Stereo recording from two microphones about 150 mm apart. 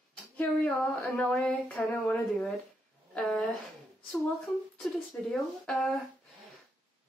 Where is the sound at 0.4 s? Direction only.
10° left (ahead or behind).